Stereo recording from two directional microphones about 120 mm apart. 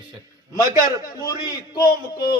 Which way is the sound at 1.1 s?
35° left (ahead or behind).